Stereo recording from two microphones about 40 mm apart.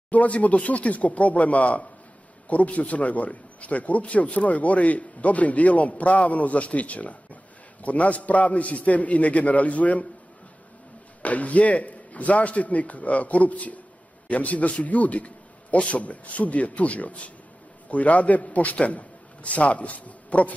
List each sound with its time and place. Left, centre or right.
0.1 s a man's voice: left
11.2 s a man's voice: left